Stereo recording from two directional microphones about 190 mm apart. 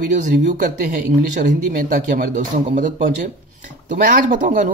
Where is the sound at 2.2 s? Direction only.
45° right (ahead or behind).